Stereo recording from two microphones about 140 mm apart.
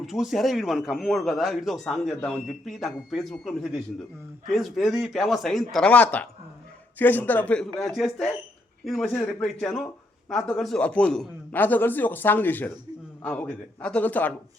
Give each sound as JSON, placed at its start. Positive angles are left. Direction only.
{"t": 0.0, "sound": "a man's voice", "side_deg": 0}